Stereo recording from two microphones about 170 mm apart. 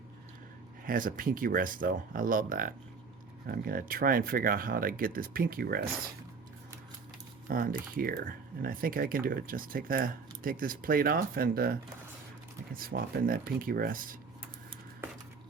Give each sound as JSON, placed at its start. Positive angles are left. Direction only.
{"t": 0.9, "sound": "speech", "side_deg": -55}
{"t": 7.4, "sound": "speech", "side_deg": -55}